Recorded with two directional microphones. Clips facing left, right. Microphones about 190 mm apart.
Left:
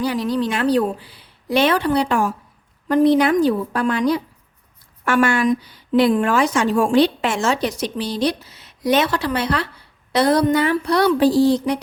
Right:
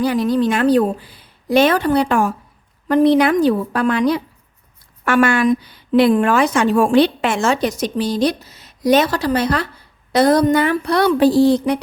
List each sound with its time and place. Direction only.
0.0 s a woman's voice: 50° right (ahead or behind)
2.9 s a woman's voice: 65° right (ahead or behind)